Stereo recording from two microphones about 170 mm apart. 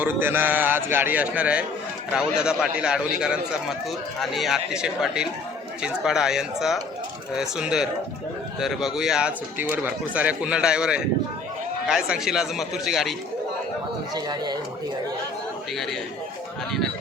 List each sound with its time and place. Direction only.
0.0 s a man's voice: 10° right (ahead or behind)
14.1 s speech: 25° right (ahead or behind)
15.7 s speech: centre (ahead or behind)